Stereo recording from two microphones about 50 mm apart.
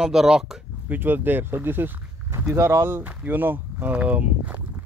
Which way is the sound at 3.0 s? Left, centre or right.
Right.